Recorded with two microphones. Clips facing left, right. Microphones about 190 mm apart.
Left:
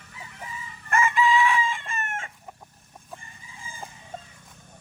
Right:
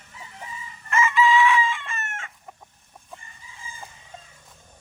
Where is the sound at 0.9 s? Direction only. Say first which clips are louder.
Right 2 dB; 55° left (ahead or behind).